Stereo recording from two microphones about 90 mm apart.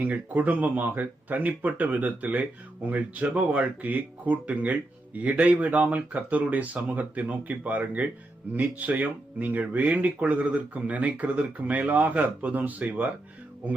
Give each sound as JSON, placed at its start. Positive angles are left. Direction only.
{"t": 0.0, "sound": "speech", "side_deg": -15}
{"t": 13.6, "sound": "music", "side_deg": -20}